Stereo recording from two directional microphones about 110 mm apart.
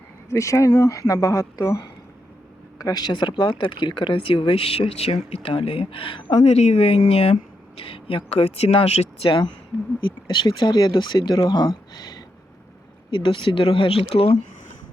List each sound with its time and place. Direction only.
0.3 s speech: 25° left (ahead or behind); by 6.4 s 50° left (ahead or behind)
6.4 s speech: 75° left (ahead or behind)
10.0 s speech: 45° left (ahead or behind)
13.1 s speech: 50° left (ahead or behind)